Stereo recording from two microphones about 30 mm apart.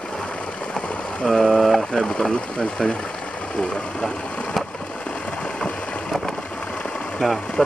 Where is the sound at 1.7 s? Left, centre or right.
Centre.